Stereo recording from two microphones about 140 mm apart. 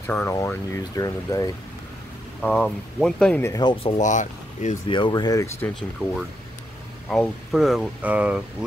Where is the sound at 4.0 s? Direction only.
60° left (ahead or behind).